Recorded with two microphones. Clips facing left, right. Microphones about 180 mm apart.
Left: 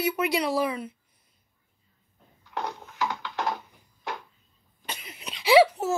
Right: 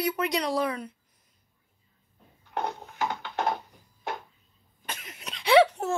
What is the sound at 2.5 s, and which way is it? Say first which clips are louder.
Dishes: right 2 dB; 50° right (ahead or behind).